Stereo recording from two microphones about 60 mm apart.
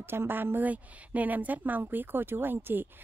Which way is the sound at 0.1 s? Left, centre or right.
Right.